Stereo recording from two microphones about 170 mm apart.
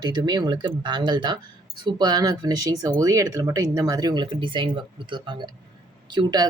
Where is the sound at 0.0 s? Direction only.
25° right (ahead or behind).